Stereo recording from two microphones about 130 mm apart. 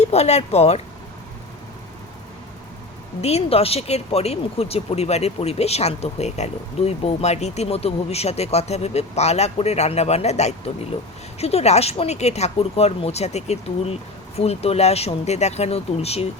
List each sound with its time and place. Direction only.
0.0 s speech: 55° left (ahead or behind)
3.2 s speech: 50° left (ahead or behind)